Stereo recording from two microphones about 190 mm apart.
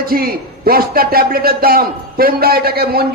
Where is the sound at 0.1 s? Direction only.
50° right (ahead or behind).